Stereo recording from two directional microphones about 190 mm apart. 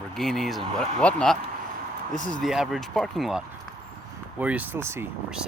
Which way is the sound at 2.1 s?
45° left (ahead or behind).